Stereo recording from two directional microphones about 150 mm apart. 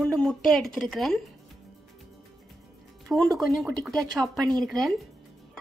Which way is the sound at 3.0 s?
Centre (ahead or behind).